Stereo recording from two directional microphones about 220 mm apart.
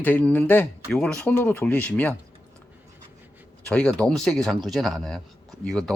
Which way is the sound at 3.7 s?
5° left (ahead or behind).